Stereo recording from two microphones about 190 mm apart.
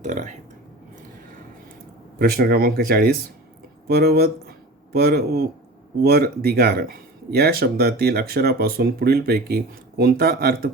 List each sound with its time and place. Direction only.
0.0 s speech: 40° right (ahead or behind)
2.1 s speech: 55° right (ahead or behind)